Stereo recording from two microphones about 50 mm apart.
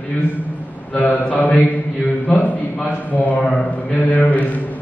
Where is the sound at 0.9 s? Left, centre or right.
Left.